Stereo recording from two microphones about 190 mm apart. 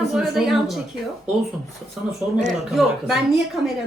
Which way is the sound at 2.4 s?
35° right (ahead or behind).